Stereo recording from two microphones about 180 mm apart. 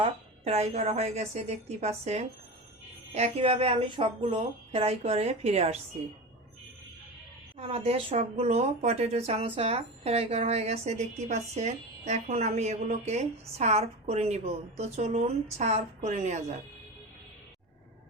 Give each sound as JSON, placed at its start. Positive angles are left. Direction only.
{"t": 0.0, "sound": "speech", "side_deg": -35}
{"t": 7.6, "sound": "speech", "side_deg": -30}